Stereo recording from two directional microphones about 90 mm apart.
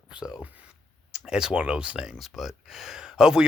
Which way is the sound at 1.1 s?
5° right (ahead or behind).